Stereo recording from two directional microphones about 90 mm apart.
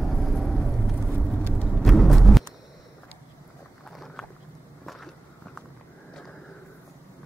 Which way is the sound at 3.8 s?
5° left (ahead or behind).